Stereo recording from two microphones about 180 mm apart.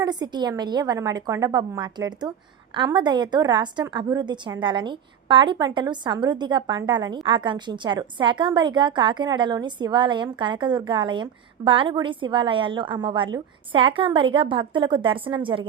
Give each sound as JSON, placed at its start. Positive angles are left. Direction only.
{"t": 0.0, "sound": "a woman's voice", "side_deg": -25}